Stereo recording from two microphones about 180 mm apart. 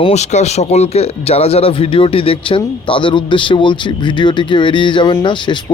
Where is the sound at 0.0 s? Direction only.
40° left (ahead or behind).